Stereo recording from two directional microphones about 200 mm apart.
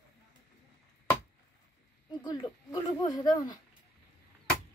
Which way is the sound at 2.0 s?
20° left (ahead or behind).